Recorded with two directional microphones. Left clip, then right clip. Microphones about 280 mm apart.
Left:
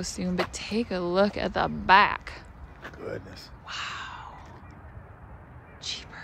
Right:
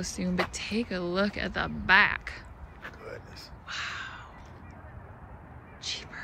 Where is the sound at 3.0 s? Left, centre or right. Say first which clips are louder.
Left 6 dB; left.